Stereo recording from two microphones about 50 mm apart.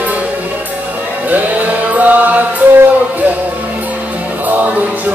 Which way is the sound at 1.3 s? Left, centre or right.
Right.